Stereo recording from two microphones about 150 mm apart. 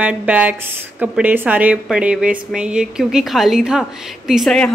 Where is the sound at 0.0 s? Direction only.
10° right (ahead or behind).